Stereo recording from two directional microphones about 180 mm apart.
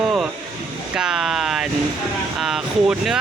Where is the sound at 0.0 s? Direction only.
Centre (ahead or behind).